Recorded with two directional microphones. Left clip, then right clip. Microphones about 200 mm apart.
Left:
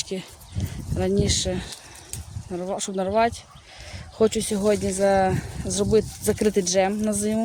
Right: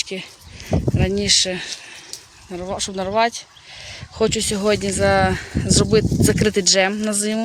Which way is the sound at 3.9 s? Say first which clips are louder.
Right 1 dB; 15° left (ahead or behind).